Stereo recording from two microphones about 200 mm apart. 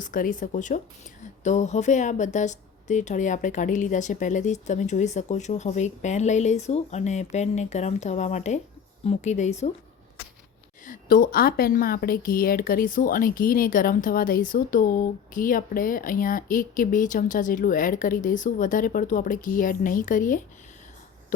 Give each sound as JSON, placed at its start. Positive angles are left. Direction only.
{"t": 0.0, "sound": "speech", "side_deg": 40}
{"t": 10.8, "sound": "a woman's voice", "side_deg": 45}